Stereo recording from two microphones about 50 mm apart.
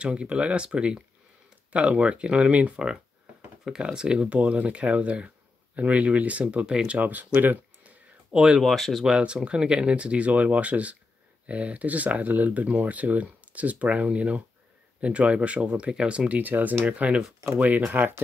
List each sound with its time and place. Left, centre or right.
0.0 s speech: right
7.0 s speech: right
8.3 s speech: centre
8.6 s speech: centre
9.2 s speech: right
16.3 s speech: right